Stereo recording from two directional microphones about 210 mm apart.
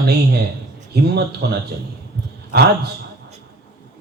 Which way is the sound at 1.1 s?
50° right (ahead or behind).